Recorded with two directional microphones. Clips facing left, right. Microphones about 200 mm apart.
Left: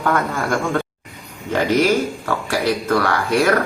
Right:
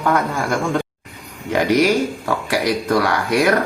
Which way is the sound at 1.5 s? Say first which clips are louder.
Right 1 dB; 15° right (ahead or behind).